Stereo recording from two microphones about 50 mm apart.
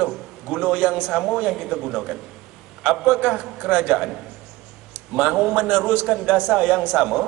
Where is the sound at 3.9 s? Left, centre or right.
Centre.